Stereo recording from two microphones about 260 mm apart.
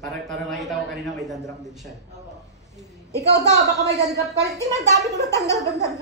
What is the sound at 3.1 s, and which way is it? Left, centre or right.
Speech, right.